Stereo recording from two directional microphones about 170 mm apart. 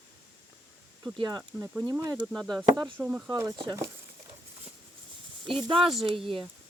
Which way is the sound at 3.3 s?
20° right (ahead or behind).